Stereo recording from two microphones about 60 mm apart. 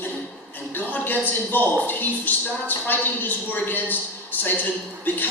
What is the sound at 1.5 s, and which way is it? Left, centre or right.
Speech, left.